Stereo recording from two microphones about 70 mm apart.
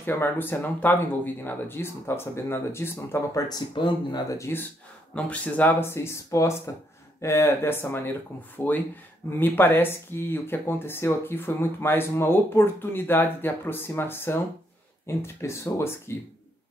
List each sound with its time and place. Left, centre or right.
0.0 s speech: left
3.3 s speech: left
4.5 s speech: left
5.1 s speech: left